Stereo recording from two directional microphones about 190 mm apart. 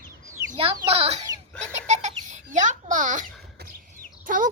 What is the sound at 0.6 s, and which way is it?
Speech, 30° right (ahead or behind).